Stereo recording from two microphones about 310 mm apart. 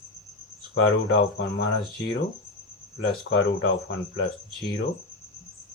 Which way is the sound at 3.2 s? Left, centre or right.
Left.